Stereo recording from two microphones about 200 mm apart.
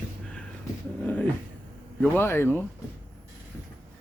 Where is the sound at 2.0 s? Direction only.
10° left (ahead or behind).